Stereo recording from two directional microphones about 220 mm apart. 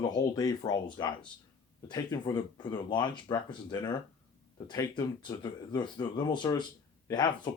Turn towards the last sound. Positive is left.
turn(degrees=20)  # may be behind; listen again after turning